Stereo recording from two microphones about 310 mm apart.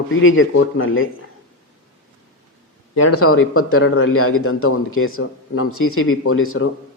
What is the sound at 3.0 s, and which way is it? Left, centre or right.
Speech, left.